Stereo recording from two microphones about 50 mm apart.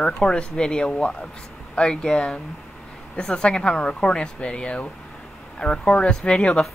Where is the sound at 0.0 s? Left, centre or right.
Centre.